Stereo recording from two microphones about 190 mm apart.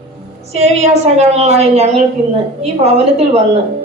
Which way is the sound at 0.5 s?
35° right (ahead or behind).